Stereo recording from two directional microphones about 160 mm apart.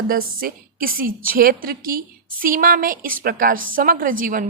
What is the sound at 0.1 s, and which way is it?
A woman's voice, 65° right (ahead or behind).